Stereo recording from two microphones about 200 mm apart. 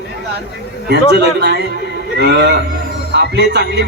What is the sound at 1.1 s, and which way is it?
A man's voice, 55° right (ahead or behind).